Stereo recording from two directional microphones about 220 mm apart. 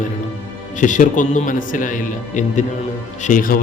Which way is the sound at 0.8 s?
35° left (ahead or behind).